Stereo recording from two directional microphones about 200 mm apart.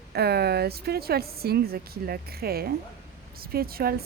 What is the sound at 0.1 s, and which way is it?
A woman's voice, 50° right (ahead or behind).